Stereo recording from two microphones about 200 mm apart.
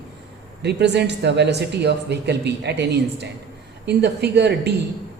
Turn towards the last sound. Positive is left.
turn(degrees=-55)  # may be behind; listen again after turning